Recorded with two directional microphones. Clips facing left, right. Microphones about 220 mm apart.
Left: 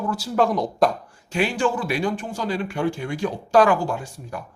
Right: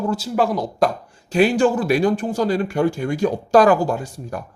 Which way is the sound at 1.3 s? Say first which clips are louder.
Right 6 dB; 40° right (ahead or behind).